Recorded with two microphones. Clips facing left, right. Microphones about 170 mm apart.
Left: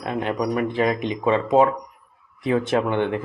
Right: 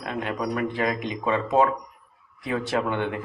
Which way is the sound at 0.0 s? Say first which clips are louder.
Left 4 dB; 25° left (ahead or behind).